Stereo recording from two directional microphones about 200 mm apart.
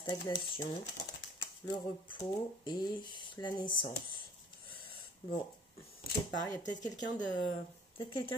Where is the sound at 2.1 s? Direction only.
25° left (ahead or behind).